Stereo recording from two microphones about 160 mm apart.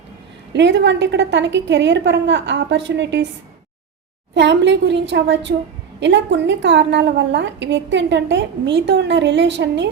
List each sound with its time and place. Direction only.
0.5 s a woman's voice: 90° right
4.4 s a woman's voice: 90° right